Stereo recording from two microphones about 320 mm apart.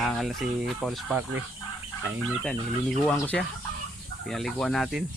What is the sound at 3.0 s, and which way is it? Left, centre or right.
Speech, centre.